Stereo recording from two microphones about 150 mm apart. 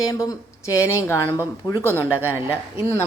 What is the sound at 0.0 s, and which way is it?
Speech, 25° left (ahead or behind).